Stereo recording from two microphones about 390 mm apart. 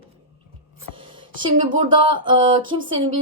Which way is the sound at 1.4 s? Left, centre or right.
Centre.